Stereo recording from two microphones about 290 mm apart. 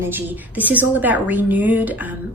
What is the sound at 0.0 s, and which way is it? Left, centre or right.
A woman's voice, centre.